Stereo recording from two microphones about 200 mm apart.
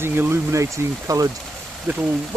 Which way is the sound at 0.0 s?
10° right (ahead or behind).